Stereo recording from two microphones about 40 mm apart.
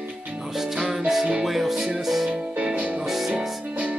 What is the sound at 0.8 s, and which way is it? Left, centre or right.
Music, centre.